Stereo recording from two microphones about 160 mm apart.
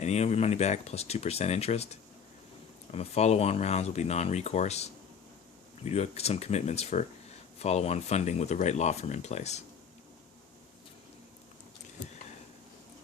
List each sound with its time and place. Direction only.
0.0 s speech: 45° left (ahead or behind)